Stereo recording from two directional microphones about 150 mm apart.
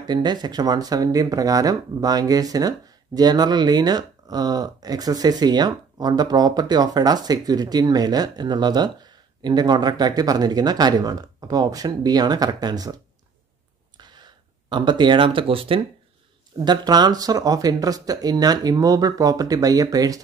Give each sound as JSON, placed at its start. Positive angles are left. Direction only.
{"t": 0.0, "sound": "speech", "side_deg": -30}
{"t": 13.9, "sound": "a sound", "side_deg": -30}
{"t": 16.5, "sound": "speech", "side_deg": -30}